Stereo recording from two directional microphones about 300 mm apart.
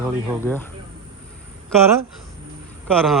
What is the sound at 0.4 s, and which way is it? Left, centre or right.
Speech, centre.